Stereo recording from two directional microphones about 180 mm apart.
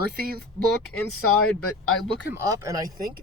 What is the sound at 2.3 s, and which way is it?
Speech, 15° right (ahead or behind).